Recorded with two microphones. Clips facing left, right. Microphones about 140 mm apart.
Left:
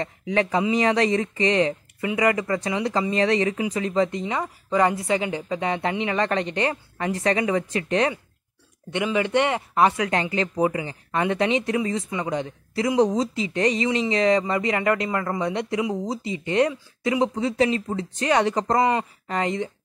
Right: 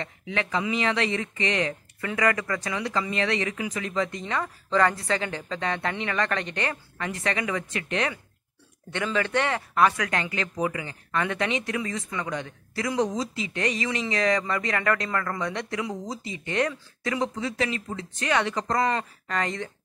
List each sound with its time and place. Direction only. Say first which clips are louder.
0.0 s speech: left 7 dB; 35° left (ahead or behind)
4.2 s speech: left 3 dB; 15° left (ahead or behind)
8.9 s speech: left 4 dB; 15° left (ahead or behind); by 18.8 s 35° left (ahead or behind)
18.8 s speech: left 4 dB; 15° left (ahead or behind)